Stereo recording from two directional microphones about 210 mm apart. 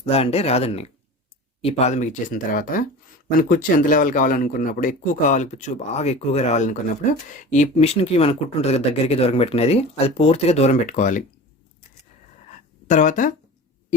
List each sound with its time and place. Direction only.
0.0 s a man's voice: 30° left (ahead or behind)
12.9 s a man's voice: 35° left (ahead or behind)